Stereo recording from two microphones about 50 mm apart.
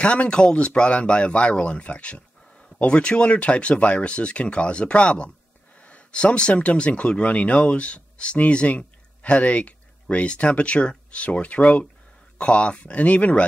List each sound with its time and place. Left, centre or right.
0.0 s speech: left